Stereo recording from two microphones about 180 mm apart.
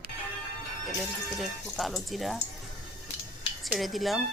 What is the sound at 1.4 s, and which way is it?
Speech, centre (ahead or behind).